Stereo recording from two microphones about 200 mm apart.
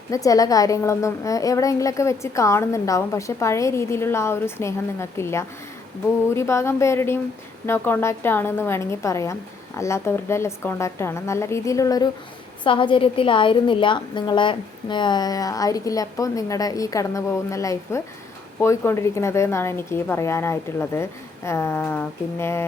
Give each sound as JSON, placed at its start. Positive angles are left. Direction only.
{"t": 0.1, "sound": "a woman's voice", "side_deg": 15}